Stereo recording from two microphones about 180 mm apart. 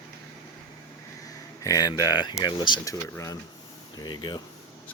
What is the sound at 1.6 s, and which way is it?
Speech, 20° left (ahead or behind).